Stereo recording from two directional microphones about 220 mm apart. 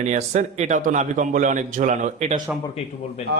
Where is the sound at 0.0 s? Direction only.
30° right (ahead or behind).